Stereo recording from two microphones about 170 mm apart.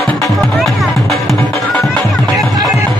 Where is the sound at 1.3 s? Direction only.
15° left (ahead or behind).